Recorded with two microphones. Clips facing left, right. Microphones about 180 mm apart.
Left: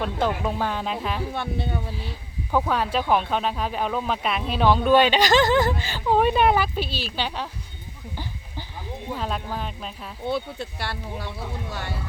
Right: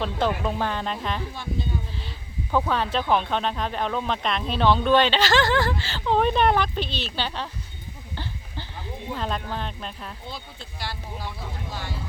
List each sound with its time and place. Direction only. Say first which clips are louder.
0.0 s speech: even; 10° left (ahead or behind)
1.3 s speech: left 3 dB; 65° left (ahead or behind)
2.0 s speech: left 2 dB; 5° left (ahead or behind)
8.1 s goat: even; 10° left (ahead or behind)
9.1 s speech: even; 5° left (ahead or behind)
10.2 s speech: left 12 dB; 60° left (ahead or behind)